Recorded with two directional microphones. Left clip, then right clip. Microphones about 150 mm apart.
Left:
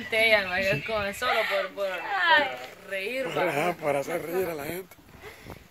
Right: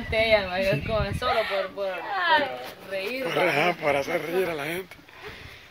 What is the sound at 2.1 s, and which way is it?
Speech, 60° right (ahead or behind).